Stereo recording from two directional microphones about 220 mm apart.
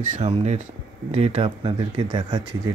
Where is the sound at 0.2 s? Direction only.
30° right (ahead or behind).